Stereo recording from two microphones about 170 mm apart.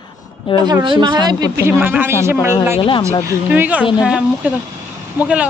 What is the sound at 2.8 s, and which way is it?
Speech, 30° left (ahead or behind).